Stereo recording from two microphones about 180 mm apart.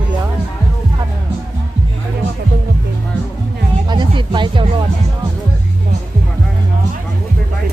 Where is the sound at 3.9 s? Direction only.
25° right (ahead or behind).